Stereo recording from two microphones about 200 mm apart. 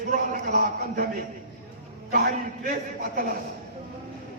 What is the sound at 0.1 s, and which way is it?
Speech, 45° right (ahead or behind).